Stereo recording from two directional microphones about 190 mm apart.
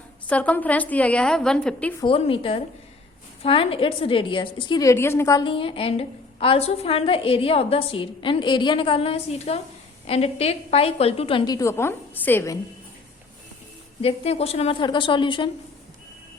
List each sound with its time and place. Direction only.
0.3 s a woman's voice: 5° left (ahead or behind)
2.0 s a woman's voice: 30° left (ahead or behind); by 12.5 s 15° left (ahead or behind)
14.0 s a woman's voice: 30° left (ahead or behind)